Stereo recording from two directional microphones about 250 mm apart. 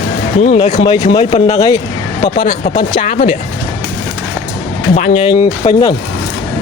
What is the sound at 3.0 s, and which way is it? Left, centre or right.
Speech, left.